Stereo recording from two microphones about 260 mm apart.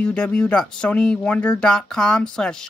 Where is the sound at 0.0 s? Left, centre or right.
Centre.